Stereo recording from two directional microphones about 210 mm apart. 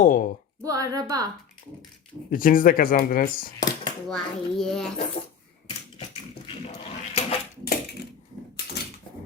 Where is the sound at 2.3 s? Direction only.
40° left (ahead or behind).